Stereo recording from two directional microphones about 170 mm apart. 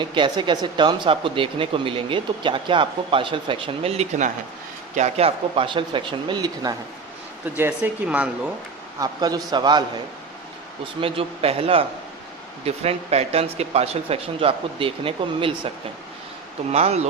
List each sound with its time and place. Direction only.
0.0 s speech: 30° right (ahead or behind)
7.4 s speech: 10° right (ahead or behind)
9.0 s speech: 20° right (ahead or behind)
11.0 s speech: 35° right (ahead or behind)
16.7 s speech: 40° right (ahead or behind)